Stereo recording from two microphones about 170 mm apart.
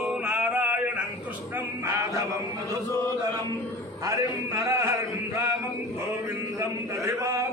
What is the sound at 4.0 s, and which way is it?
A man's voice, 15° right (ahead or behind).